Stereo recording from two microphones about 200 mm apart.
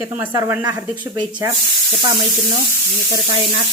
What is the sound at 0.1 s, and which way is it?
Speech, 10° right (ahead or behind).